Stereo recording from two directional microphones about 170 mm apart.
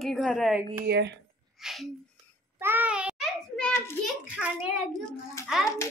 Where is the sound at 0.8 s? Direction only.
80° right.